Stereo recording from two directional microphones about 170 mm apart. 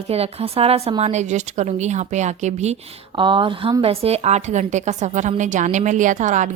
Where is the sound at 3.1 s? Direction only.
30° right (ahead or behind).